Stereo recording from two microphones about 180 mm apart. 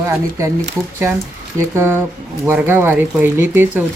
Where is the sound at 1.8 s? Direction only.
15° right (ahead or behind).